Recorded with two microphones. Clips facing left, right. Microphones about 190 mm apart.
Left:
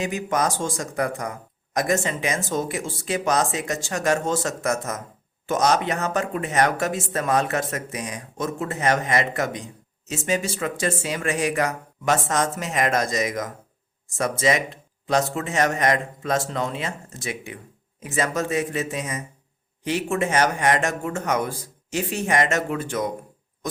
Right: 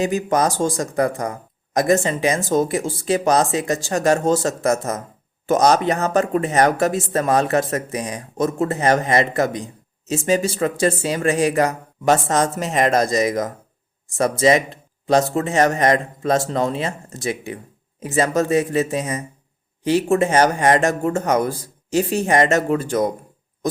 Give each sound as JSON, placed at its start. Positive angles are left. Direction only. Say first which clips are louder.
{"t": 0.0, "sound": "speech", "louder": "right 5 dB", "side_deg": -35}